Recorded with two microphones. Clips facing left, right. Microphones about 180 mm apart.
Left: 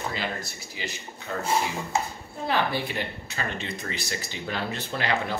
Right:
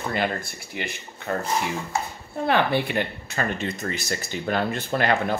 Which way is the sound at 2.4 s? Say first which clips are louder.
Right 5 dB; 60° right (ahead or behind).